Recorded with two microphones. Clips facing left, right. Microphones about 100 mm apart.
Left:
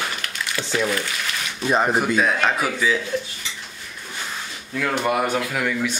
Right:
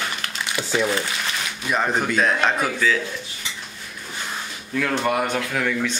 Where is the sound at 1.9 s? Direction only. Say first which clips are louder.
Left 1 dB; 5° left (ahead or behind).